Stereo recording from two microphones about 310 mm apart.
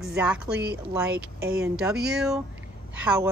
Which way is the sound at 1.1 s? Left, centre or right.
Right.